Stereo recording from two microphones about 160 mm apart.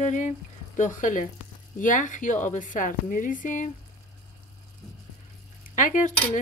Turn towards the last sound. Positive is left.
turn(degrees=55)  # may be behind; listen again after turning